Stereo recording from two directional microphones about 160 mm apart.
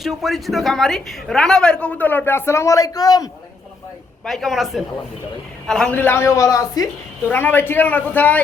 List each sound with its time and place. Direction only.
0.0 s a man's voice: centre (ahead or behind); by 3.2 s 25° left (ahead or behind)
4.3 s a man's voice: centre (ahead or behind)